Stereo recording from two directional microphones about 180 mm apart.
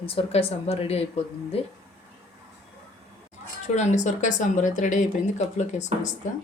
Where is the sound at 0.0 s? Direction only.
30° left (ahead or behind).